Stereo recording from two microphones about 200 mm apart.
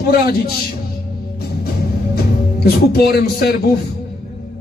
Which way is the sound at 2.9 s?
50° left (ahead or behind).